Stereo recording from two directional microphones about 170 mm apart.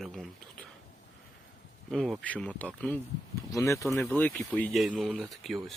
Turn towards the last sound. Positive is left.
turn(degrees=0)  # may be behind; listen again after turning